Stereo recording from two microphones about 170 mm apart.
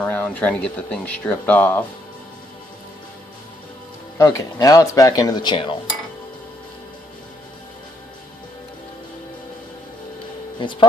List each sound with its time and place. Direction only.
0.0 s speech: 10° left (ahead or behind)
4.2 s speech: 20° left (ahead or behind)
10.6 s speech: 30° left (ahead or behind)